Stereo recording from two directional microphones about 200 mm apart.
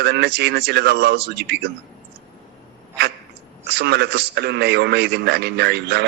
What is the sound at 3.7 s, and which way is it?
A man's voice, 55° right (ahead or behind).